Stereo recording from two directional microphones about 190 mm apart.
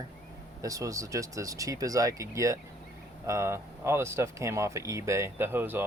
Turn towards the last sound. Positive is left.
turn(degrees=-10)  # may be behind; listen again after turning